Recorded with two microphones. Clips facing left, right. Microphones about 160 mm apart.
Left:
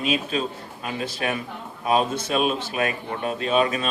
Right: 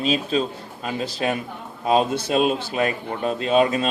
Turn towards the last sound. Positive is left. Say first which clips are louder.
# right 3 dB
turn(degrees=-30)  # may be behind; listen again after turning